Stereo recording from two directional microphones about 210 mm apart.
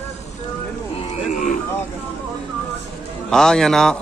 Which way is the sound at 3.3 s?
Centre (ahead or behind).